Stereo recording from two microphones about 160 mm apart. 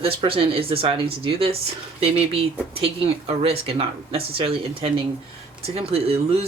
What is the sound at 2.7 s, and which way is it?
Speech, 35° right (ahead or behind).